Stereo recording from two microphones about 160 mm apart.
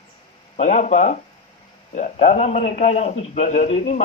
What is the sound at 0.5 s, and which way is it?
A man's voice, 50° left (ahead or behind).